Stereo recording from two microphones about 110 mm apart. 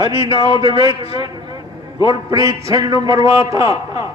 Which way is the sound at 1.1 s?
40° right (ahead or behind).